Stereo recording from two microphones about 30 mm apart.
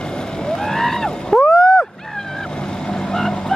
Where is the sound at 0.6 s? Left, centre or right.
Centre.